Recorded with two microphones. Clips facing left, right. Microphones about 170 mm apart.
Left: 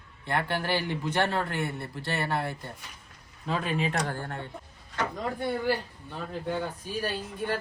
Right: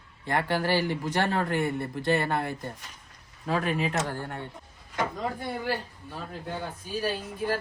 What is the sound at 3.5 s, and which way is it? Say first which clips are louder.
Speech: right 2 dB; centre (ahead or behind).